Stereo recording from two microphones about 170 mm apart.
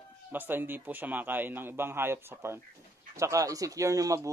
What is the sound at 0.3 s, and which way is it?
Speech, 10° right (ahead or behind).